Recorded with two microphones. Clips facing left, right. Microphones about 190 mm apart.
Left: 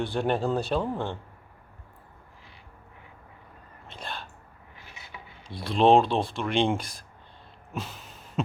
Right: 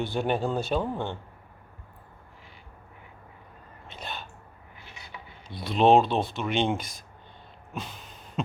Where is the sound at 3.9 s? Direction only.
Centre (ahead or behind).